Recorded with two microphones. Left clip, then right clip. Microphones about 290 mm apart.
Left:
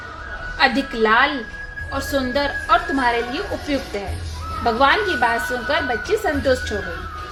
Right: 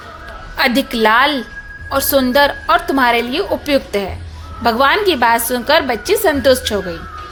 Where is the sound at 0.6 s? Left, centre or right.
Right.